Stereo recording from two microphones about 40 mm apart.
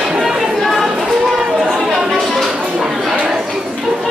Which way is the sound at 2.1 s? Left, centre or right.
Centre.